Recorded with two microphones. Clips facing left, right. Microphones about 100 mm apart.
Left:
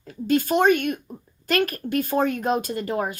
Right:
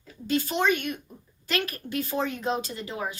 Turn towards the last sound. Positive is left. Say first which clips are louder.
# left 7 dB
turn(degrees=55)  # may be behind; listen again after turning